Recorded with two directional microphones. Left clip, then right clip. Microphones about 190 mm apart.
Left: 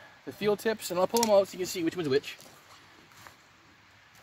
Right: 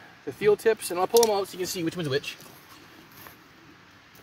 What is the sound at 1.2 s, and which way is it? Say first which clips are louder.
Speech: left 1 dB; 55° left (ahead or behind).